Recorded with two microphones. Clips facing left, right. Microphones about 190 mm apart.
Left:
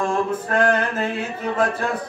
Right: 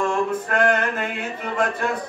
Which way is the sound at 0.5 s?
30° left (ahead or behind).